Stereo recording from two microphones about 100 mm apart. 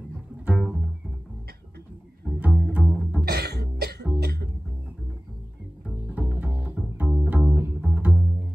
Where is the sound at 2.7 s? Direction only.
10° right (ahead or behind).